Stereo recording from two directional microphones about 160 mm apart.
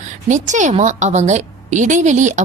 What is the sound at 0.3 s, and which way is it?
A woman's voice, 50° right (ahead or behind).